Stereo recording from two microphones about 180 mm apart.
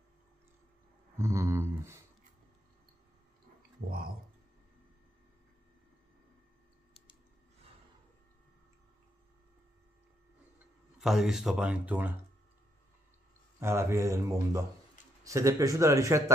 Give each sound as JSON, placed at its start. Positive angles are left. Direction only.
{"t": 1.1, "sound": "speech", "side_deg": -15}
{"t": 11.0, "sound": "speech", "side_deg": 0}
{"t": 13.6, "sound": "speech", "side_deg": -15}